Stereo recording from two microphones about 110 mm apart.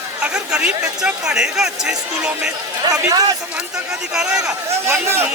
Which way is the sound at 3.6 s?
5° right (ahead or behind).